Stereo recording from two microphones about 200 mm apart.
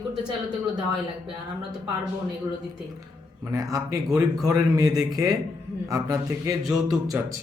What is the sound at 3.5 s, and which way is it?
A man's voice, 15° right (ahead or behind).